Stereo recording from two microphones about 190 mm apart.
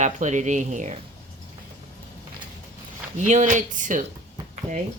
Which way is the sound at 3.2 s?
40° right (ahead or behind).